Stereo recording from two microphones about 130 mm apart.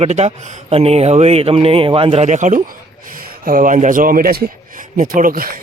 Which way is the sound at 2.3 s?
70° right (ahead or behind).